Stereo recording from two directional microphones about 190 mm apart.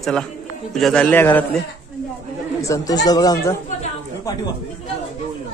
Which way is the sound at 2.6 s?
15° left (ahead or behind).